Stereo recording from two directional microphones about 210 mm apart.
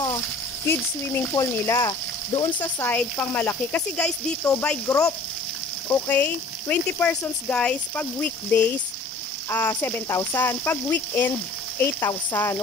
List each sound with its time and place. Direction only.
0.7 s speech: 15° left (ahead or behind)